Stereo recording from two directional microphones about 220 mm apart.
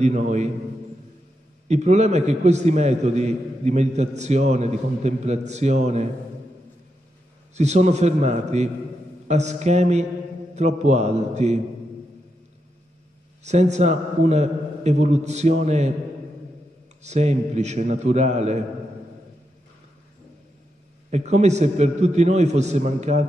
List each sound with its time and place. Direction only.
0.0 s a man's voice: 30° right (ahead or behind)
1.7 s a man's voice: 30° right (ahead or behind)
7.5 s a man's voice: 30° right (ahead or behind)
13.4 s a man's voice: 30° right (ahead or behind)
17.0 s a man's voice: 30° right (ahead or behind)
21.1 s a man's voice: 30° right (ahead or behind)